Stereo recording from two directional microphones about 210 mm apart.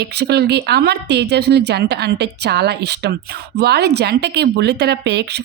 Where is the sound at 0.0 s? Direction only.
50° right (ahead or behind).